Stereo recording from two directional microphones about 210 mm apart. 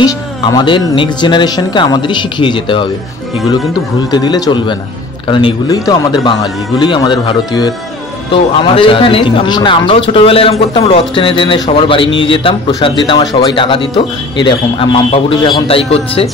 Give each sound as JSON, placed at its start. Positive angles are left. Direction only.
{"t": 0.0, "sound": "a man's voice", "side_deg": 20}
{"t": 4.1, "sound": "a man's voice", "side_deg": 20}